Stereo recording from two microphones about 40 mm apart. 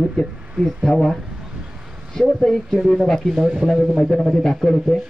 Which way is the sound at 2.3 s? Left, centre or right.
Centre.